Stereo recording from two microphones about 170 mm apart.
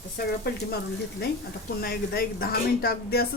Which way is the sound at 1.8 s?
65° left (ahead or behind).